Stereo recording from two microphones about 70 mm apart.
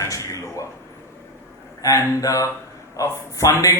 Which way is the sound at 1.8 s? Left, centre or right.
Left.